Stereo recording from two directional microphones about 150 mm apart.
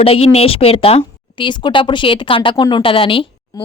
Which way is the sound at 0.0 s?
40° left (ahead or behind).